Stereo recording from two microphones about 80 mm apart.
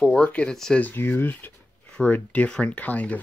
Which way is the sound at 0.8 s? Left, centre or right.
Centre.